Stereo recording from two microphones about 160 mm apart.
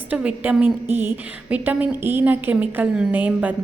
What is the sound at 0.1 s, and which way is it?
A woman's voice, 10° right (ahead or behind).